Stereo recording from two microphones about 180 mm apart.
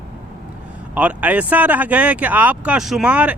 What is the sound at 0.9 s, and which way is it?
Speech, 10° right (ahead or behind).